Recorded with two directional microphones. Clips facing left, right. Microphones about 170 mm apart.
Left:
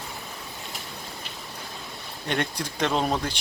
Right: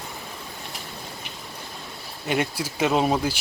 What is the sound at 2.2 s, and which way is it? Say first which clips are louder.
Speech: right 3 dB; 5° right (ahead or behind).